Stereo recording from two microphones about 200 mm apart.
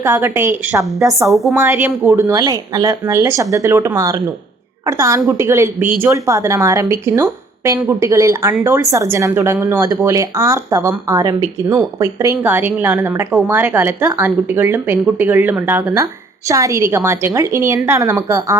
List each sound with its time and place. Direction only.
0.0 s speech: 10° right (ahead or behind)